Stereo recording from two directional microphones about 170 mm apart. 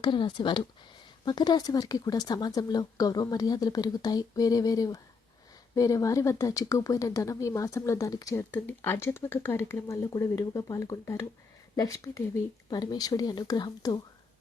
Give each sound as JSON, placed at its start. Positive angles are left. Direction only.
{"t": 0.0, "sound": "speech", "side_deg": 30}